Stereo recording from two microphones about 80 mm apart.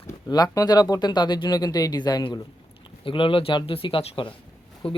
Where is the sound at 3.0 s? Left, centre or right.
Left.